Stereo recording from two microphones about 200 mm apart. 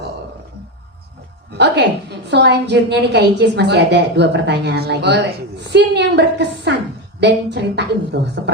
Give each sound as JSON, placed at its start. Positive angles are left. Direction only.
{"t": 1.5, "sound": "a woman's voice", "side_deg": -60}